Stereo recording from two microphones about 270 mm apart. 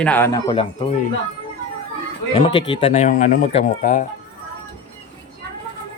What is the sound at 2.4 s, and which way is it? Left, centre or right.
Speech, centre.